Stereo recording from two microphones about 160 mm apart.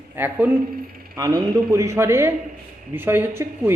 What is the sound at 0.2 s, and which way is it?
Speech, 10° right (ahead or behind).